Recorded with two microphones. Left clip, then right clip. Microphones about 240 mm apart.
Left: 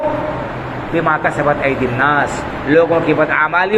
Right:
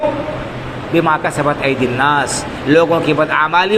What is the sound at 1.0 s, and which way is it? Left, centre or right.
Speech, right.